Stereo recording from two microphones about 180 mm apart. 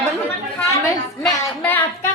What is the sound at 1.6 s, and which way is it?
Speech, 10° left (ahead or behind).